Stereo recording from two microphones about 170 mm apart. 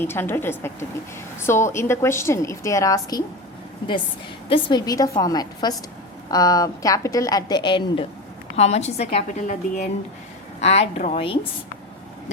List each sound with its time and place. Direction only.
0.0 s a woman's voice: 15° left (ahead or behind)
4.4 s a woman's voice: 30° left (ahead or behind)
8.5 s a woman's voice: 40° left (ahead or behind)